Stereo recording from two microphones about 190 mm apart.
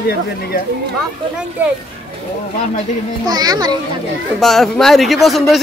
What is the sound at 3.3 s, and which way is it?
Speech, 20° right (ahead or behind).